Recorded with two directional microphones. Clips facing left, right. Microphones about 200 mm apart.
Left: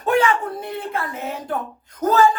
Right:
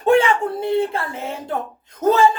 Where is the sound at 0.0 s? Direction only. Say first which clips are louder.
Right 3 dB; 30° right (ahead or behind).